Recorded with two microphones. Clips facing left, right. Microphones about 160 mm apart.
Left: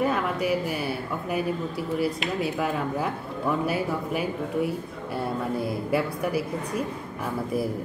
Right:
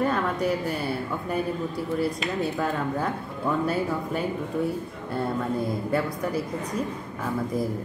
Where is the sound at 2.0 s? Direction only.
5° left (ahead or behind).